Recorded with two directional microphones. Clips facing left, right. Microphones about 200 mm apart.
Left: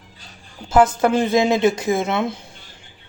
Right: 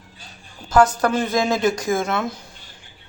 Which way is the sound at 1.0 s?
25° left (ahead or behind).